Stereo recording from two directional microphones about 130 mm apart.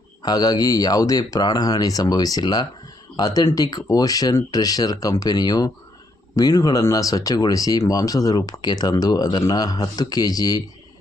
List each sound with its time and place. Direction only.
0.2 s speech: 30° left (ahead or behind)